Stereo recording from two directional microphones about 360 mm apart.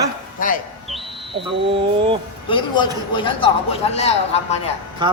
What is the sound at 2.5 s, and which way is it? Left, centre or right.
A man's voice, centre.